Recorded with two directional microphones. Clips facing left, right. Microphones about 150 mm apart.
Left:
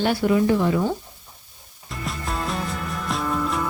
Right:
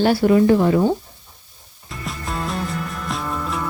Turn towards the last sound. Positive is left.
turn(degrees=0)  # may be behind; listen again after turning